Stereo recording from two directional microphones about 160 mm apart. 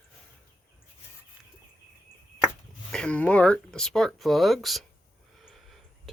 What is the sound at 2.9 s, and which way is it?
Speech, 5° left (ahead or behind).